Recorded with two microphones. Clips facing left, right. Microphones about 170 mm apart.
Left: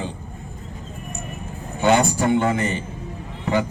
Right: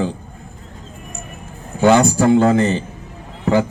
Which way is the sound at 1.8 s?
90° right.